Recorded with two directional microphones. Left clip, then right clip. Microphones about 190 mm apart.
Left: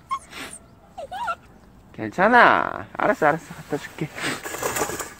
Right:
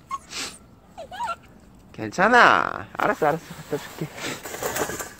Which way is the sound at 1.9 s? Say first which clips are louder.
Left 1 dB; 5° left (ahead or behind).